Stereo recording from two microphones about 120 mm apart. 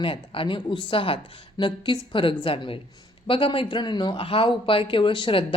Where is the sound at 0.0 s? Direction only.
45° left (ahead or behind).